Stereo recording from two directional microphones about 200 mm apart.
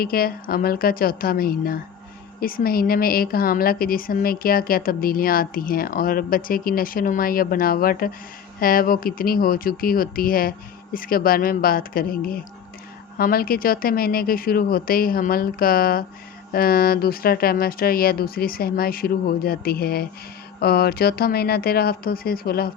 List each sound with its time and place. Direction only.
0.0 s a woman's voice: 50° left (ahead or behind)